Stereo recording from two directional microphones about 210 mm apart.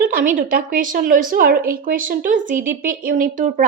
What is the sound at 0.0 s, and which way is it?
A woman's voice, 40° right (ahead or behind).